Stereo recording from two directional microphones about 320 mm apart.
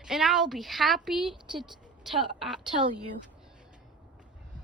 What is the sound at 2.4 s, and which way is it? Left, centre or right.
Speech, centre.